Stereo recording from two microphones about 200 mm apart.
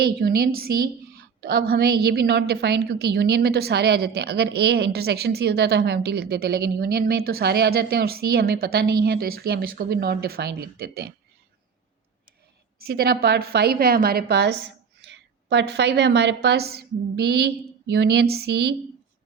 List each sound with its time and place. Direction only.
0.0 s a woman's voice: 50° right (ahead or behind)
12.9 s a woman's voice: 50° right (ahead or behind)